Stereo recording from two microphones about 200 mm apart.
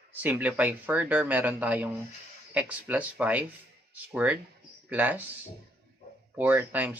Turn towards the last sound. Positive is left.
turn(degrees=-10)  # may be behind; listen again after turning